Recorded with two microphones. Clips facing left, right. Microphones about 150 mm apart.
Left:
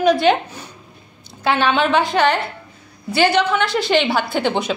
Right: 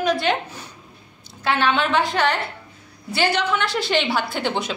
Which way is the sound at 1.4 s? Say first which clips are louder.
Left 3 dB; 25° left (ahead or behind).